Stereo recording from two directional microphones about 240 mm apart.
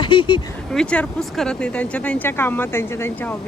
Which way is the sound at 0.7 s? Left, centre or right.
Centre.